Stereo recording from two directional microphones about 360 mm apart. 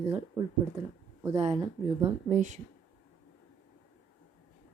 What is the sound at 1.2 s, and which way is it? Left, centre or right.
Speech, centre.